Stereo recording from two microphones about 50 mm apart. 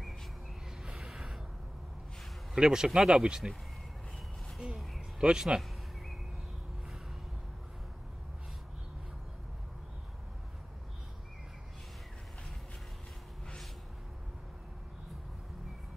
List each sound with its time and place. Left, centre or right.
0.8 s gasp: centre
2.5 s speech: centre
5.2 s speech: centre